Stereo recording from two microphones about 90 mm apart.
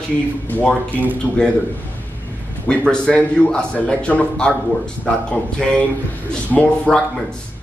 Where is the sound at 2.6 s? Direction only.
10° left (ahead or behind).